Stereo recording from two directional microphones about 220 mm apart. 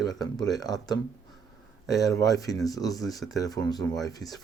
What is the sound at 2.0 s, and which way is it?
Speech, 15° left (ahead or behind).